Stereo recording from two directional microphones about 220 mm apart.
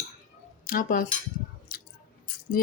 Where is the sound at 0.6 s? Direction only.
40° left (ahead or behind).